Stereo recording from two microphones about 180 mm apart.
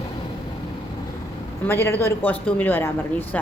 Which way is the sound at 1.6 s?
10° left (ahead or behind).